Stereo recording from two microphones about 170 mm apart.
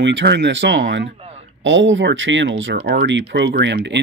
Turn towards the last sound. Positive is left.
turn(degrees=-90)